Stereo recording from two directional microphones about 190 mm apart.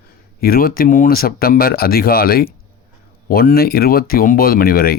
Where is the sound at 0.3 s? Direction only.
50° left (ahead or behind).